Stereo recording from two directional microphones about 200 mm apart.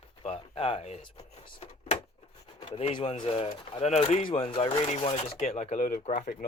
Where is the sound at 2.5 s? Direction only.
25° left (ahead or behind).